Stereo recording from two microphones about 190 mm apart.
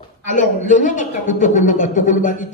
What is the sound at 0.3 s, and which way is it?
Speech, 40° left (ahead or behind).